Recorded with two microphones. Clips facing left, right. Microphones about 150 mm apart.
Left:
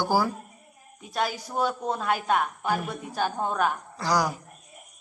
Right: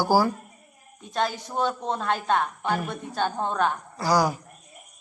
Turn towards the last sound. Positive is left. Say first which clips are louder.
# right 3 dB
turn(degrees=-5)  # may be behind; listen again after turning